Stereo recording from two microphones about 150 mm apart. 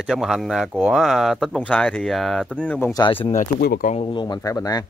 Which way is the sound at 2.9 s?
35° left (ahead or behind).